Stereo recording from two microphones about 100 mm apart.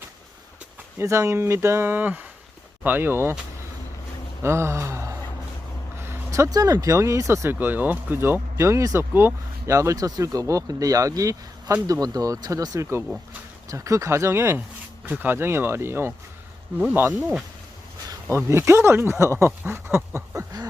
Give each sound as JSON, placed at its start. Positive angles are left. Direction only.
{"t": 0.9, "sound": "speech", "side_deg": -30}
{"t": 4.4, "sound": "gasp", "side_deg": -25}
{"t": 6.0, "sound": "vehicle", "side_deg": -25}
{"t": 6.7, "sound": "speech", "side_deg": -30}
{"t": 18.3, "sound": "speech", "side_deg": -25}